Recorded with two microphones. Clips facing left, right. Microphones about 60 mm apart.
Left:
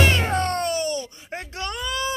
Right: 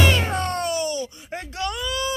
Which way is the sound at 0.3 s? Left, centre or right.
Left.